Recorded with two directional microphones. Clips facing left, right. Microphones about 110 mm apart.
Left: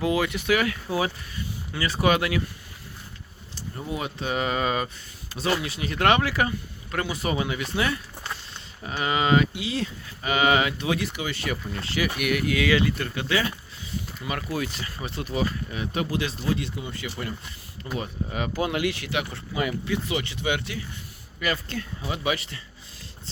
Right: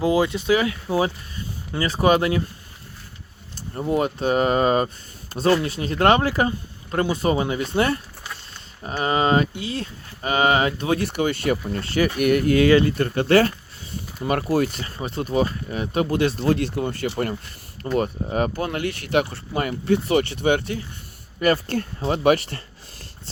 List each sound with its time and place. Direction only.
0.0 s speech: 30° right (ahead or behind)
3.8 s speech: 45° right (ahead or behind)
11.0 s speech: 55° right (ahead or behind)
14.8 s speech: 35° right (ahead or behind)
16.0 s speech: 55° right (ahead or behind)
17.8 s speech: 30° right (ahead or behind)
18.3 s speech: 45° right (ahead or behind)
18.5 s speech: 10° left (ahead or behind)
18.9 s speech: 50° right (ahead or behind)